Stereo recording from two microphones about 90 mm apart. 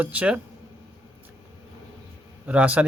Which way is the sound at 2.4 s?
15° right (ahead or behind).